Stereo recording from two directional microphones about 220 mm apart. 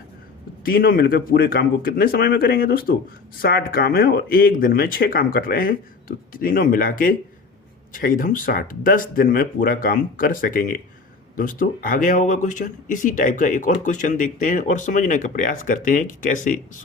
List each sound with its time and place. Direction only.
0.6 s speech: 40° left (ahead or behind)